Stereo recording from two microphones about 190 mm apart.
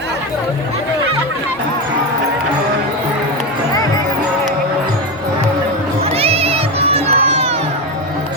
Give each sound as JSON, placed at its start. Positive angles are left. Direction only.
{"t": 6.1, "sound": "crowd", "side_deg": -30}